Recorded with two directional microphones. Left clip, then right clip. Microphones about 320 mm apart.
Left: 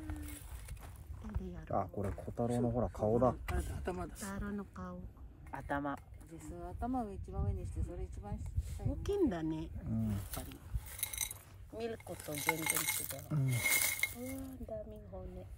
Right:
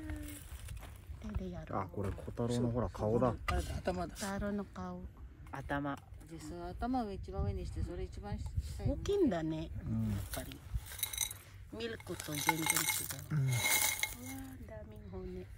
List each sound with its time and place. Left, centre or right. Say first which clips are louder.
0.1 s a sound: right 1 dB; centre
1.8 s speech: left 2 dB; centre
3.4 s speech: right 4 dB; centre
5.5 s speech: even; centre
6.3 s speech: right 2 dB; centre